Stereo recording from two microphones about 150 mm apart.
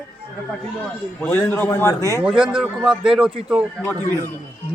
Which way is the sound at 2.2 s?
5° right (ahead or behind).